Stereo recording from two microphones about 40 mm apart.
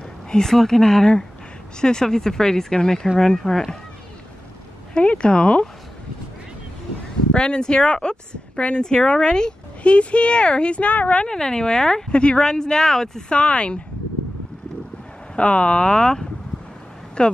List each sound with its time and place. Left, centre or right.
0.3 s speech: centre
4.9 s speech: left
7.3 s speech: left
11.2 s speech: centre
13.3 s speech: left
15.3 s speech: left